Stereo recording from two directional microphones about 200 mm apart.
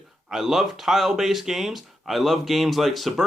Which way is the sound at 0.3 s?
Centre (ahead or behind).